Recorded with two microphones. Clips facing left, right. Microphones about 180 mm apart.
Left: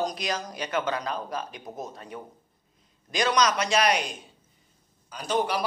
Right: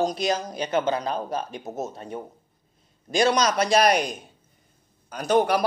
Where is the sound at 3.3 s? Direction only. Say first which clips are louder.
Right 3 dB; 30° right (ahead or behind).